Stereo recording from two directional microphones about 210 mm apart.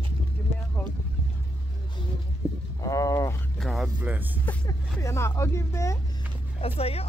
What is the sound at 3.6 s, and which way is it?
Speech, centre (ahead or behind).